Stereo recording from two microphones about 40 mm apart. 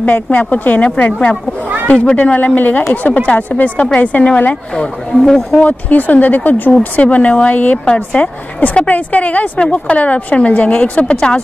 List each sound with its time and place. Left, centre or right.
0.0 s a woman's voice: left
5.2 s speech: centre
5.6 s a woman's voice: left
7.8 s a woman's voice: left